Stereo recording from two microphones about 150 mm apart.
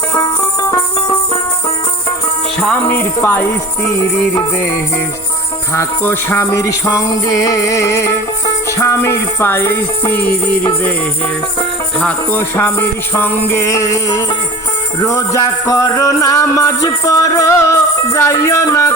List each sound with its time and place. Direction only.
2.6 s music: 10° left (ahead or behind)
5.7 s music: 15° left (ahead or behind)
11.9 s music: 10° left (ahead or behind)